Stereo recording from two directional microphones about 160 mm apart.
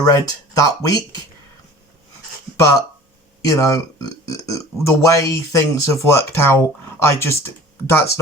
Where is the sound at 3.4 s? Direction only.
20° left (ahead or behind).